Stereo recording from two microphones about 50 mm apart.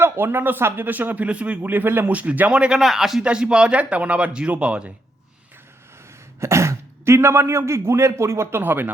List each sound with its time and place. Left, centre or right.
0.0 s speech: right
1.6 s speech: right
2.0 s speech: right
2.5 s speech: centre
2.8 s speech: centre
3.2 s speech: centre
6.4 s speech: right
8.6 s speech: right